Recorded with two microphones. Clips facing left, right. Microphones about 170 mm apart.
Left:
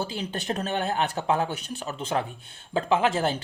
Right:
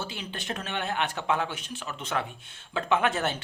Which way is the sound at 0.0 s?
35° left (ahead or behind).